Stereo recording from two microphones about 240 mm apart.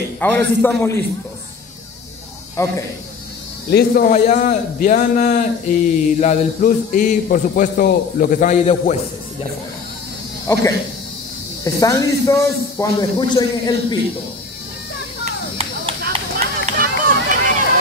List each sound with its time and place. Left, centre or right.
0.2 s a man's voice: centre
3.7 s a man's voice: left
10.4 s a man's voice: centre
15.2 s a sound: right
16.7 s run: right